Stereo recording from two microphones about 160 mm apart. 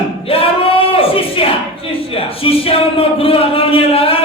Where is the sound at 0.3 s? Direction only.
35° left (ahead or behind).